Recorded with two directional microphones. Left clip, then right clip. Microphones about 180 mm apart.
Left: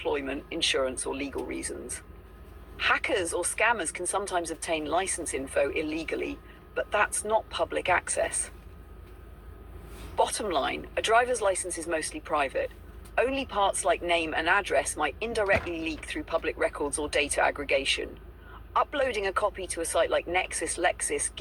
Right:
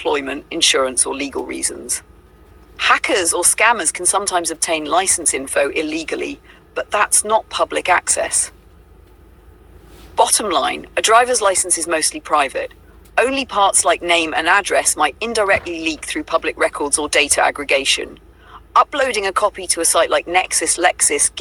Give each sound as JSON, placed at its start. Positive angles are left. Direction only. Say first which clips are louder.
{"t": 0.0, "sound": "speech", "louder": "right 10 dB", "side_deg": -50}
{"t": 10.2, "sound": "speech", "louder": "right 11 dB", "side_deg": -45}